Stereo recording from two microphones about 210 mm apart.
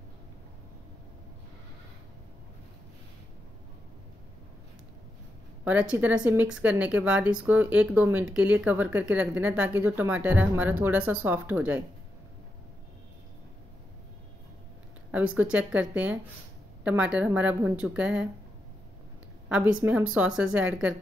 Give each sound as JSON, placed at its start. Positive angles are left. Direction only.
{"t": 5.6, "sound": "speech", "side_deg": -5}
{"t": 15.0, "sound": "speech", "side_deg": -5}
{"t": 19.8, "sound": "speech", "side_deg": -10}